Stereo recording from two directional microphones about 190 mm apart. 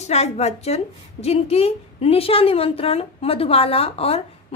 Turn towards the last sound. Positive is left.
turn(degrees=30)  # may be behind; listen again after turning